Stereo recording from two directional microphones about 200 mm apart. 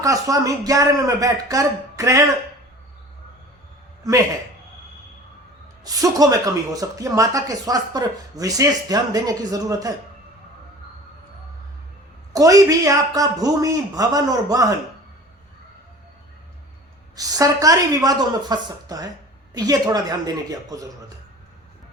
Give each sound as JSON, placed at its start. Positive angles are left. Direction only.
{"t": 0.0, "sound": "speech", "side_deg": -15}
{"t": 4.0, "sound": "speech", "side_deg": -15}
{"t": 5.8, "sound": "speech", "side_deg": -20}
{"t": 12.3, "sound": "speech", "side_deg": -15}
{"t": 17.2, "sound": "speech", "side_deg": -20}